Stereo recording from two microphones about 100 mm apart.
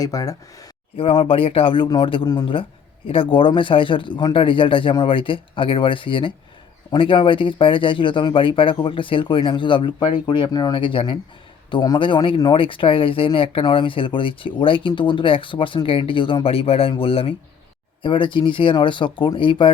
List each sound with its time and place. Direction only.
0.0 s speech: 35° left (ahead or behind)
0.9 s speech: 60° left (ahead or behind)
18.0 s speech: 55° left (ahead or behind)